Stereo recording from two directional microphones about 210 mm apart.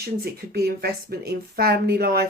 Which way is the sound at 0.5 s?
50° right (ahead or behind).